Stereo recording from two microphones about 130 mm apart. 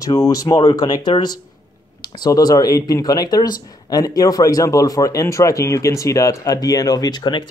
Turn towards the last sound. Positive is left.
turn(degrees=35)  # may be behind; listen again after turning